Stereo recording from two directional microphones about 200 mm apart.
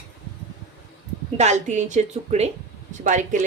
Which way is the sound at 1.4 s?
35° right (ahead or behind).